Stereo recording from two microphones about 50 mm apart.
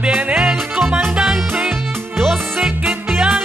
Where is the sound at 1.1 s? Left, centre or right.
Centre.